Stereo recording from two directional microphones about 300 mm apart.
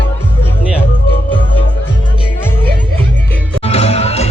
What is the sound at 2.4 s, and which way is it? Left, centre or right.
Music, centre.